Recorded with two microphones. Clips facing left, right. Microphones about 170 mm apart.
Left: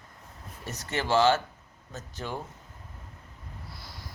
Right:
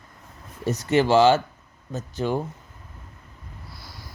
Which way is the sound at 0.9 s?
90° right.